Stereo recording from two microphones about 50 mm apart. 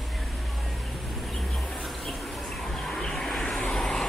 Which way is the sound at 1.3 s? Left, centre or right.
Centre.